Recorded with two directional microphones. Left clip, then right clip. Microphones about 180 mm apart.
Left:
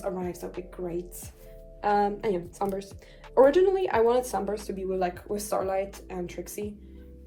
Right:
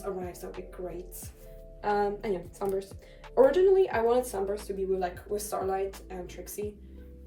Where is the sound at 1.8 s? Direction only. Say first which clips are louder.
Left 4 dB; 20° left (ahead or behind).